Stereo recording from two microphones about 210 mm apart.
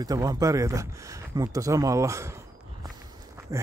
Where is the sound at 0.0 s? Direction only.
15° right (ahead or behind).